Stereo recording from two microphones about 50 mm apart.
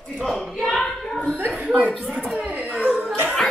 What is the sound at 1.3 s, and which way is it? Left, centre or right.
Speech, right.